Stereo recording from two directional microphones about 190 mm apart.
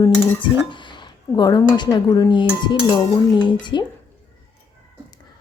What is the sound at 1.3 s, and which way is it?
A woman's voice, 20° left (ahead or behind).